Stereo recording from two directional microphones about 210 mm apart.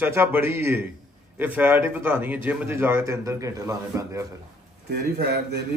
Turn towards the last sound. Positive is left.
turn(degrees=-50)  # may be behind; listen again after turning